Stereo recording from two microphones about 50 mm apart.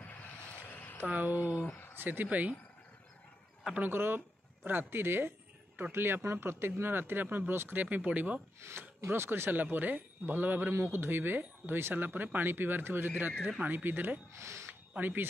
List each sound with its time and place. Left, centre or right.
1.0 s speech: right
3.8 s speech: right
7.8 s speech: right
8.5 s speech: right
10.7 s speech: right
14.3 s speech: right
14.7 s a sound: right